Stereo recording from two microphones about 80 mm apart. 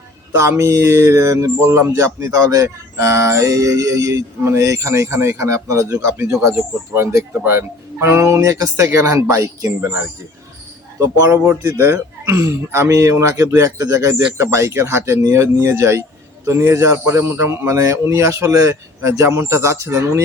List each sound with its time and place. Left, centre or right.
0.3 s speech: right
6.6 s speech: right
11.0 s speech: right